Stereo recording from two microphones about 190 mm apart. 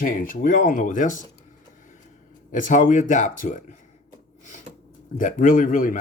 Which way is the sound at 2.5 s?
45° left (ahead or behind).